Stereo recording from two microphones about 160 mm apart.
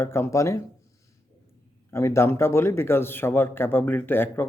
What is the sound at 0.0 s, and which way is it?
Speech, 15° left (ahead or behind).